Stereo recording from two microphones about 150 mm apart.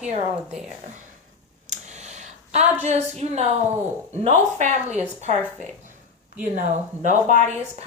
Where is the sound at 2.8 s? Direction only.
45° right (ahead or behind).